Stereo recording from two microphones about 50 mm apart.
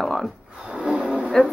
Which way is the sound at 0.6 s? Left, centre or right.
Centre.